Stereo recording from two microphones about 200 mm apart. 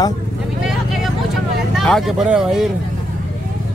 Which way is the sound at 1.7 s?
Centre (ahead or behind).